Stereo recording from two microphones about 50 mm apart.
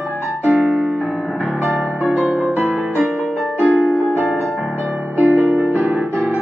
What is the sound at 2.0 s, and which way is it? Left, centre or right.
Music, right.